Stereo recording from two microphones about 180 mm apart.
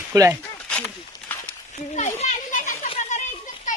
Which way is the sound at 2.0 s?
40° left (ahead or behind).